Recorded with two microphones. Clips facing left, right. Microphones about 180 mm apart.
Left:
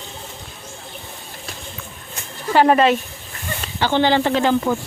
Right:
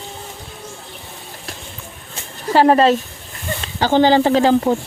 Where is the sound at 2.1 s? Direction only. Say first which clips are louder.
Right 1 dB; 30° right (ahead or behind).